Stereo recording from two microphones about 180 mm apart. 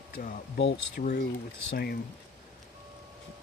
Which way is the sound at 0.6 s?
80° left.